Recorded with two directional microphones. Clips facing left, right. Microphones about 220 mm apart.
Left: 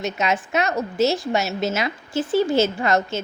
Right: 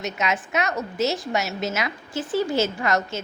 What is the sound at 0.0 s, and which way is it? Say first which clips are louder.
A woman's voice: left 3 dB; 30° left (ahead or behind).